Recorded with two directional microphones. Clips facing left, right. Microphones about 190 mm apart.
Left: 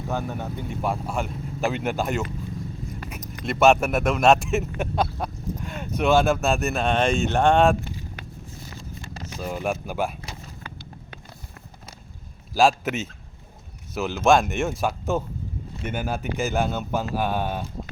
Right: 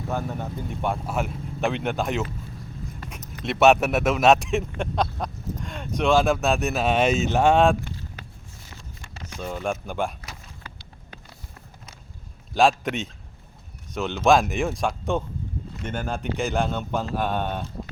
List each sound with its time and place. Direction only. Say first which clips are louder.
0.1 s speech: even; centre (ahead or behind)
8.8 s a sound: left 6 dB; 35° left (ahead or behind)
9.4 s speech: left 1 dB; 5° left (ahead or behind)
12.5 s speech: even; centre (ahead or behind)